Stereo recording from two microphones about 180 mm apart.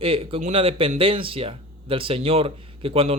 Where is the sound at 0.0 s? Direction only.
30° right (ahead or behind).